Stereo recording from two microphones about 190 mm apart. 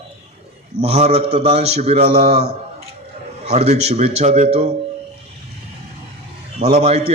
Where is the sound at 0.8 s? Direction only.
35° right (ahead or behind).